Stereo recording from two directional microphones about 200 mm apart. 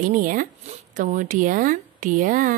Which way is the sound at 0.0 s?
40° right (ahead or behind).